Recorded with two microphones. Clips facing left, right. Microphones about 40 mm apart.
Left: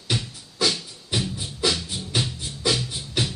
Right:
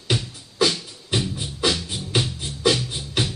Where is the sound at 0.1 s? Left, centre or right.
Right.